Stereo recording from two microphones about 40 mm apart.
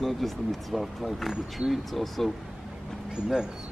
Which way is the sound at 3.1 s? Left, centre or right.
Centre.